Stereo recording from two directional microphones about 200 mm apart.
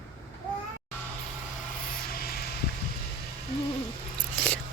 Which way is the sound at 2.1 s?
50° left (ahead or behind).